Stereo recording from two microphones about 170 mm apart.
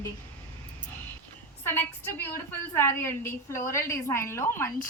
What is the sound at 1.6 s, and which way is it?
A woman's voice, 10° left (ahead or behind).